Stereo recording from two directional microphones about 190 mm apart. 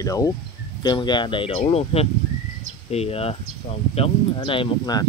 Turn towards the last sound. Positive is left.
turn(degrees=25)  # may be behind; listen again after turning